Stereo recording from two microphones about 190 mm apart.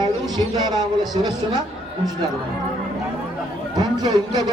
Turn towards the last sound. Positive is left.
turn(degrees=-20)  # may be behind; listen again after turning